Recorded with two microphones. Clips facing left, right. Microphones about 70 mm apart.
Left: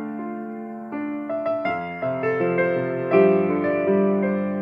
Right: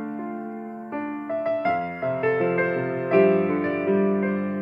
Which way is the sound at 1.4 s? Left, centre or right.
Left.